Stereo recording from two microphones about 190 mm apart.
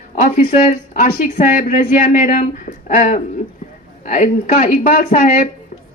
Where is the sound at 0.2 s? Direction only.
40° left (ahead or behind).